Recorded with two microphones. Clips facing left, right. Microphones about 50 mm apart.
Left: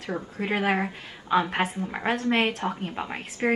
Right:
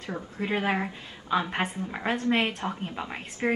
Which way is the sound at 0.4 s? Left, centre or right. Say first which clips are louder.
Left 1 dB; left.